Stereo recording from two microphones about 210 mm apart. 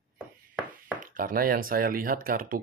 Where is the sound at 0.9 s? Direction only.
40° right (ahead or behind).